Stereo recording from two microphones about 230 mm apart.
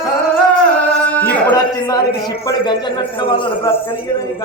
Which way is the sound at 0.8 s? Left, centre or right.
Centre.